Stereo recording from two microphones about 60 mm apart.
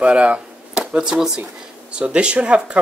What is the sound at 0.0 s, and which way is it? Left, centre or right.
Speech, right.